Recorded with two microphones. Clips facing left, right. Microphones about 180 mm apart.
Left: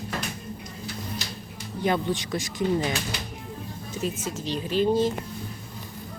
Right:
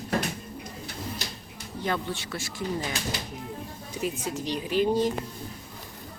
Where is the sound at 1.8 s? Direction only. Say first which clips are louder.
Left 5 dB; 15° left (ahead or behind).